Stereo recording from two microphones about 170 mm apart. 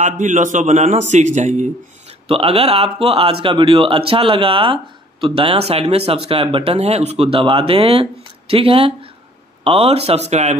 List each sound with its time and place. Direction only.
0.0 s a man's voice: 50° right (ahead or behind)